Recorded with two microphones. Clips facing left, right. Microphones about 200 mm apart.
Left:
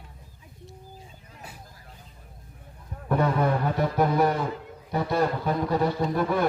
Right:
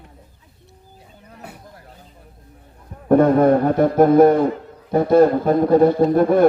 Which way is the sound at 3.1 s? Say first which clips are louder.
Right 11 dB; 50° right (ahead or behind).